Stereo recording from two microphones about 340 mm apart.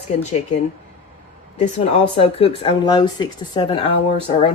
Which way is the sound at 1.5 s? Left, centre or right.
Centre.